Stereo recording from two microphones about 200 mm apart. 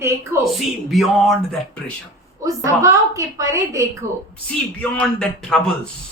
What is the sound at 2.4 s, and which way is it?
A woman's voice, 15° right (ahead or behind).